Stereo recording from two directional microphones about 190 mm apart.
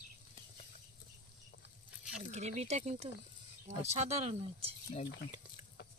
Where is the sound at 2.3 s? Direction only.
35° right (ahead or behind).